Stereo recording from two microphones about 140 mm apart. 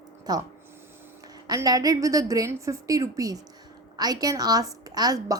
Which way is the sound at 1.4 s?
25° right (ahead or behind).